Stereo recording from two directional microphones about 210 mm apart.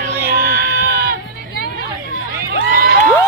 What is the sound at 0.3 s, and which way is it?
Music, 45° right (ahead or behind).